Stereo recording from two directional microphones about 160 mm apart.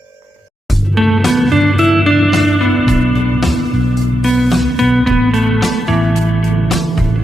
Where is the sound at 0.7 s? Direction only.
Centre (ahead or behind).